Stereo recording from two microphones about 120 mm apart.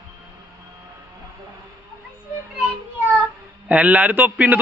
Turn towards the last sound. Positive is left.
turn(degrees=-15)  # may be behind; listen again after turning